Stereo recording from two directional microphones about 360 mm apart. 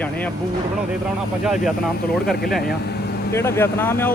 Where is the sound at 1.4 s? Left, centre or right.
Centre.